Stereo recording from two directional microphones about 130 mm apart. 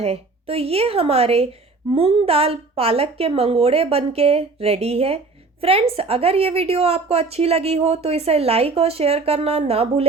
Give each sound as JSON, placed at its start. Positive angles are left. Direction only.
{"t": 0.0, "sound": "a woman's voice", "side_deg": -50}